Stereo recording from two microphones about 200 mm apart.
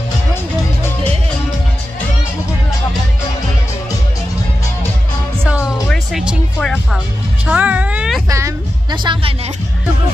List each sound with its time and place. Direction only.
5.6 s music: centre (ahead or behind)
7.4 s speech: 5° right (ahead or behind); by 9.3 s 25° right (ahead or behind)